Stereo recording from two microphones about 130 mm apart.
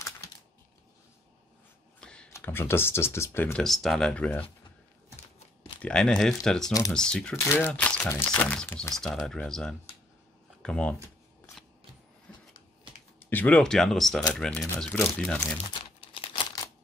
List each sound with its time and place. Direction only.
2.0 s a sound: 5° left (ahead or behind)
2.3 s speech: 20° left (ahead or behind)
3.5 s speech: centre (ahead or behind)
5.8 s speech: 5° left (ahead or behind)
6.6 s speech: 25° left (ahead or behind)
6.9 s speech: 5° left (ahead or behind)
7.3 s speech: 20° left (ahead or behind)
13.2 s speech: 15° left (ahead or behind)
16.0 s crumpling: 45° left (ahead or behind)